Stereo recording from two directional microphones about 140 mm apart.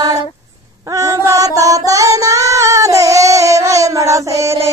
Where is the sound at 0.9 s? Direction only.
25° right (ahead or behind).